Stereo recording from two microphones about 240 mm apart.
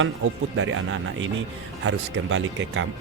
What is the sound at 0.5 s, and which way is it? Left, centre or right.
Speech, right.